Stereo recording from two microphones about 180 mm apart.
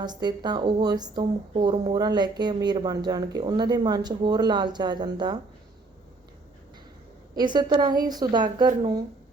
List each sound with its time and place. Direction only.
0.0 s a woman's voice: 25° right (ahead or behind)
7.3 s a woman's voice: 25° right (ahead or behind)